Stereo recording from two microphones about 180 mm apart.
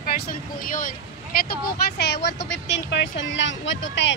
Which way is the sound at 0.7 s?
50° left (ahead or behind).